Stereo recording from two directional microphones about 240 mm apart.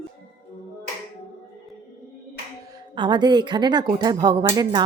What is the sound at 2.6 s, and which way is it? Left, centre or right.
A woman's voice, centre.